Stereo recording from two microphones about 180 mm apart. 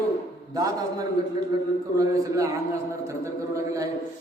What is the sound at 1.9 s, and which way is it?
Speech, 20° right (ahead or behind).